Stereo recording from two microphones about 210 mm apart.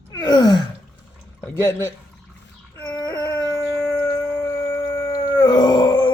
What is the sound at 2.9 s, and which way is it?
Howl, 20° left (ahead or behind).